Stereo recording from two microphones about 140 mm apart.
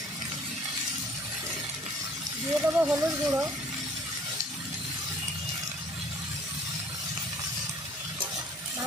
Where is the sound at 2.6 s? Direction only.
10° right (ahead or behind).